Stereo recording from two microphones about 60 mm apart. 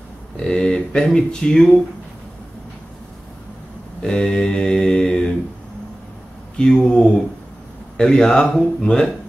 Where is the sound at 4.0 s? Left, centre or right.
Centre.